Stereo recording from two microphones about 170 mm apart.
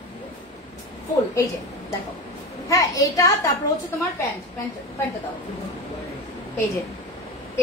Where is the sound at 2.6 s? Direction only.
20° left (ahead or behind).